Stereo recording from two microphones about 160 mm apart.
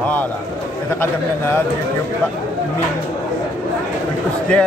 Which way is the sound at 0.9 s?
15° left (ahead or behind).